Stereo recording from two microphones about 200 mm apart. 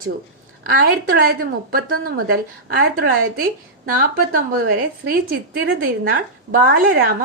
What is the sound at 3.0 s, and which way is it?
Speech, 45° right (ahead or behind).